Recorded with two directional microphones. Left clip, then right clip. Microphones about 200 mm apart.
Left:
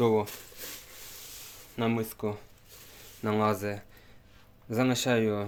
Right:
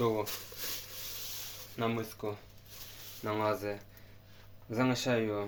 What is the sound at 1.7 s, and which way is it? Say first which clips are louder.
Speech: left 4 dB; 60° left (ahead or behind).